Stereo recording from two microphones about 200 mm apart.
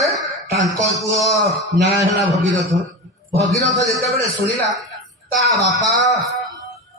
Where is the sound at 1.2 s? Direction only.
Centre (ahead or behind).